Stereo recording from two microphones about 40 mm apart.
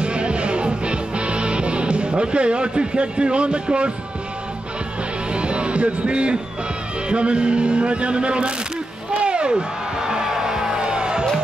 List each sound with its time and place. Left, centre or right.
0.0 s music: right
5.3 s music: right
7.1 s speech: right
9.2 s music: right